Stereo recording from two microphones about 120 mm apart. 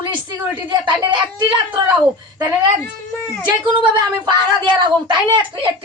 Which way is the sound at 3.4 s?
40° right (ahead or behind).